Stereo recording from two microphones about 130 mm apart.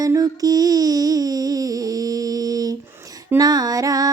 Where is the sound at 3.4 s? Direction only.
30° right (ahead or behind).